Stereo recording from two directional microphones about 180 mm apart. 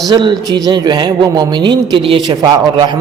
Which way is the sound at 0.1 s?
25° right (ahead or behind).